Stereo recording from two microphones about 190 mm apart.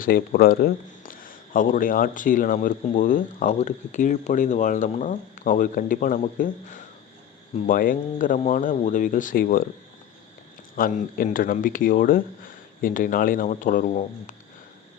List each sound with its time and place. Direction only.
0.0 s a man's voice: 50° left (ahead or behind)
10.8 s a man's voice: 50° left (ahead or behind)